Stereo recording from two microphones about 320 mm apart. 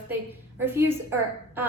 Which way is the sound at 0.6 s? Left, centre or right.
Centre.